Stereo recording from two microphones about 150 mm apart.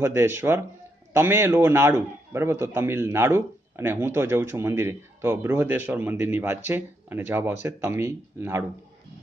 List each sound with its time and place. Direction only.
0.0 s a man's voice: 15° right (ahead or behind)